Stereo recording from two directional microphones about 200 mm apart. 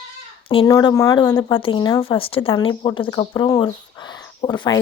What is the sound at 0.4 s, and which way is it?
Speech, 25° left (ahead or behind).